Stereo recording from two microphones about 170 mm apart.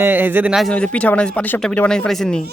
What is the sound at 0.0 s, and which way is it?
Speech, 10° right (ahead or behind).